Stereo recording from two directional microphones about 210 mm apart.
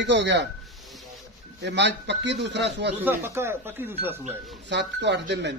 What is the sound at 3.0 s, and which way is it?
Speech, 10° right (ahead or behind).